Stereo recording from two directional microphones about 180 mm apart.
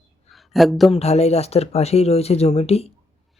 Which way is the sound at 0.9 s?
35° left (ahead or behind).